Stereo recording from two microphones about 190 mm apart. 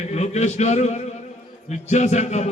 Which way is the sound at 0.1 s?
35° left (ahead or behind).